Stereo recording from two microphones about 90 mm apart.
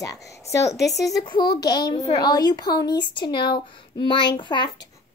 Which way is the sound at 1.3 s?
55° left (ahead or behind).